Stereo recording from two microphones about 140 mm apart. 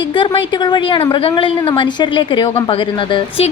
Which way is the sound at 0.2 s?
35° left (ahead or behind).